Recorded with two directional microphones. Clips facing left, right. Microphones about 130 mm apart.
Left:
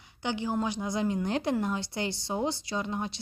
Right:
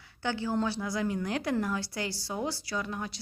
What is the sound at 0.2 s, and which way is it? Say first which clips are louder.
A woman's voice: even; 20° left (ahead or behind).